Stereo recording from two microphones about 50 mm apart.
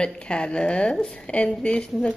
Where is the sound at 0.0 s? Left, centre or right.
Left.